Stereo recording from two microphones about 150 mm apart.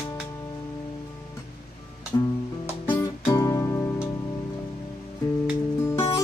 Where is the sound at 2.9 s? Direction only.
20° left (ahead or behind).